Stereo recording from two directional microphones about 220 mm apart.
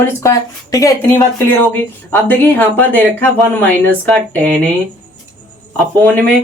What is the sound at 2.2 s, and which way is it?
Speech, 10° left (ahead or behind).